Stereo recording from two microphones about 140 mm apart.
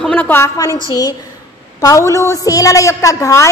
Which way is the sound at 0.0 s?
10° left (ahead or behind).